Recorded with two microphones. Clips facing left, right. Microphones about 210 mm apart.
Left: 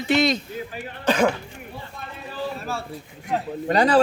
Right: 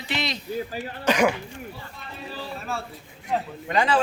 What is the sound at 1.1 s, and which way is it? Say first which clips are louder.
Speech: left 1 dB; 10° right (ahead or behind).